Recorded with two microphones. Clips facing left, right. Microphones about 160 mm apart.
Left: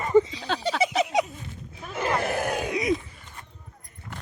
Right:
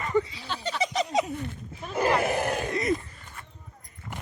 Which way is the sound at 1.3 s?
60° right (ahead or behind).